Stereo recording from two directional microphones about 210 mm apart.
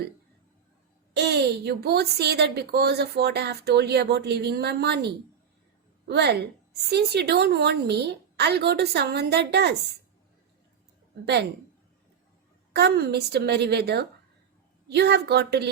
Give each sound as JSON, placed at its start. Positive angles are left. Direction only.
{"t": 1.1, "sound": "a woman's voice", "side_deg": -50}
{"t": 12.7, "sound": "a woman's voice", "side_deg": -50}